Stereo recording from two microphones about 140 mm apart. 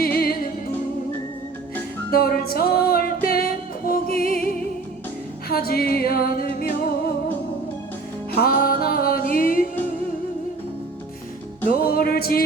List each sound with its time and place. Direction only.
0.0 s music: 90° left
2.0 s music: 90° left
5.5 s music: 90° left
8.4 s music: 90° left
11.8 s music: 90° left